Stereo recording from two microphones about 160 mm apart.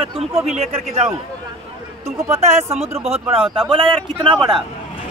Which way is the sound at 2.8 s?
40° right (ahead or behind).